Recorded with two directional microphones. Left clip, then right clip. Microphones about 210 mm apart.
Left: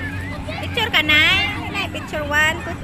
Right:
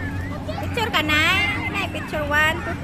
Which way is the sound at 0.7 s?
Centre (ahead or behind).